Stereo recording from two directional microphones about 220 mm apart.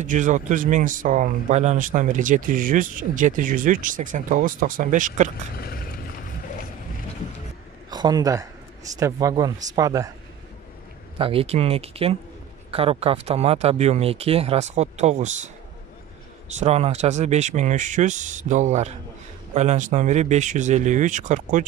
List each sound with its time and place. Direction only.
0.0 s speech: 35° right (ahead or behind)
5.6 s vehicle: 45° left (ahead or behind)
7.9 s speech: 20° right (ahead or behind)
11.1 s speech: 25° right (ahead or behind)
16.5 s speech: 30° right (ahead or behind)